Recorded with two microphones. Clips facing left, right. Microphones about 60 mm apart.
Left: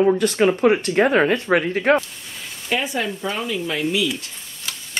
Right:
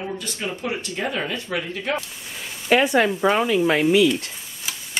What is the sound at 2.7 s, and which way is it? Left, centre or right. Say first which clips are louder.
Speech: right 6 dB; right.